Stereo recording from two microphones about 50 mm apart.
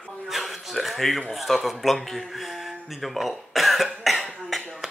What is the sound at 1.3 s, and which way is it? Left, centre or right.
Speech, centre.